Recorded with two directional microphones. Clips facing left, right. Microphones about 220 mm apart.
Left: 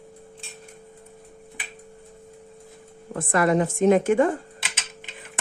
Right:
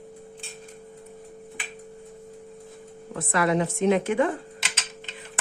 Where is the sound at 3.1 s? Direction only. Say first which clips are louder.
Left 3 dB; 50° left (ahead or behind).